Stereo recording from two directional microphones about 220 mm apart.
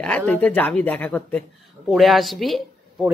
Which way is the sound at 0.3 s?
5° left (ahead or behind).